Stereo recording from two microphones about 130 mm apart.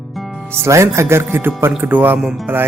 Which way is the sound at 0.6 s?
20° right (ahead or behind).